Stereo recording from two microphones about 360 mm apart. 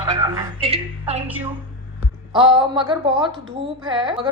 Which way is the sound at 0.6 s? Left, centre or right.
Centre.